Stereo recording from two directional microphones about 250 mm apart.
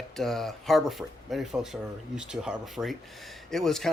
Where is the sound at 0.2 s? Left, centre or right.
Centre.